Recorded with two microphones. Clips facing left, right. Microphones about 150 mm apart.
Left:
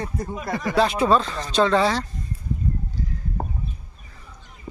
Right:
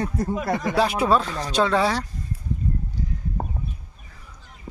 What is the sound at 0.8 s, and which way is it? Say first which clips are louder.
Speech: left 2 dB; 10° right (ahead or behind).